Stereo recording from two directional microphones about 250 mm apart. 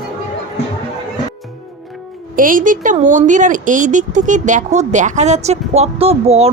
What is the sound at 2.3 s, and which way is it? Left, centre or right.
Speech, right.